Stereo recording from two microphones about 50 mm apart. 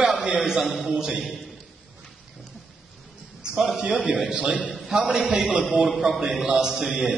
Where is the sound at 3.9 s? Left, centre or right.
Right.